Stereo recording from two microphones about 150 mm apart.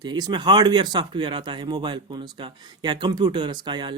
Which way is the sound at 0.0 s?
30° right (ahead or behind).